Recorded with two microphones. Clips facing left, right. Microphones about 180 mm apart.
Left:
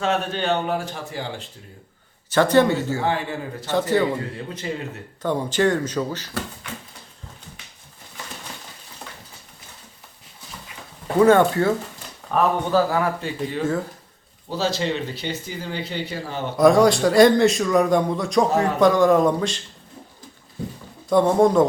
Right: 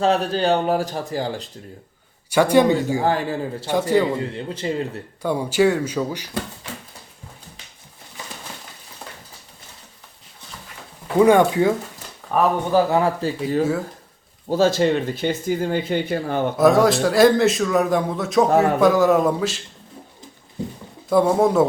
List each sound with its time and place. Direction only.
0.0 s speech: 35° right (ahead or behind)
2.3 s speech: 10° right (ahead or behind)
3.0 s speech: 35° right (ahead or behind)
3.7 s speech: 10° right (ahead or behind)
4.4 s speech: 30° right (ahead or behind)
5.2 s speech: 10° right (ahead or behind)
11.2 s speech: 15° right (ahead or behind)
12.9 s speech: 30° right (ahead or behind)
13.6 s speech: 10° right (ahead or behind)
14.5 s speech: 50° right (ahead or behind)
16.6 s a man's voice: centre (ahead or behind)
21.1 s a man's voice: 5° right (ahead or behind)